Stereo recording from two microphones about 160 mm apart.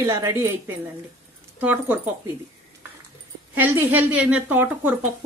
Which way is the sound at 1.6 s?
10° right (ahead or behind).